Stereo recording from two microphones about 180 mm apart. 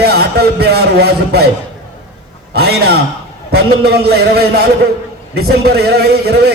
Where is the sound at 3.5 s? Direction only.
60° right (ahead or behind).